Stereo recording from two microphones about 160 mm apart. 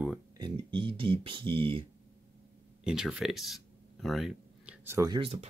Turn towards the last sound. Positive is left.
turn(degrees=-40)  # may be behind; listen again after turning